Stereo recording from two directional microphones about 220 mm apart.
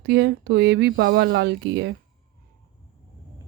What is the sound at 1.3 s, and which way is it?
Speech, 50° right (ahead or behind).